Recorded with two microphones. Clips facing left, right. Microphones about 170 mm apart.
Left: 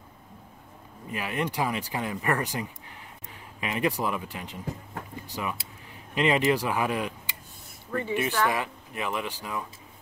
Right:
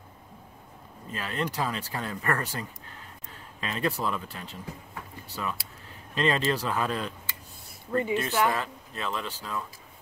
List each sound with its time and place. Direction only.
1.0 s speech: 15° left (ahead or behind)
7.9 s speech: 20° right (ahead or behind)
8.5 s speech: 15° left (ahead or behind)